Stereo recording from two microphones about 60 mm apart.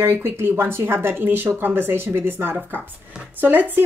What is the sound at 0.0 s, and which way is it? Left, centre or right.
Speech, right.